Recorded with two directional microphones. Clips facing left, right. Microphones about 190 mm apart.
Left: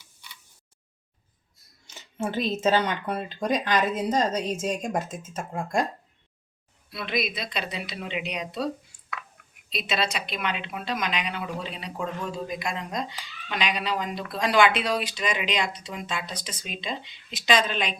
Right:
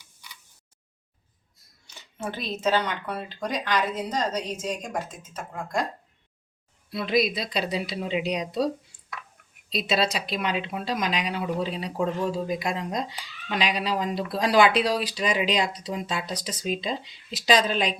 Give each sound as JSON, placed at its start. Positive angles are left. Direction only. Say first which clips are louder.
{"t": 1.9, "sound": "speech", "louder": "left 4 dB", "side_deg": 20}
{"t": 6.9, "sound": "speech", "louder": "right 5 dB", "side_deg": -35}